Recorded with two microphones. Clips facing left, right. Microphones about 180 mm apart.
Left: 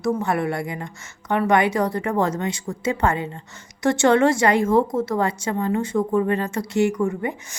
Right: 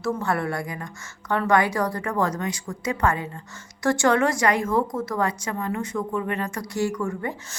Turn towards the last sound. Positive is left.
turn(degrees=20)  # may be behind; listen again after turning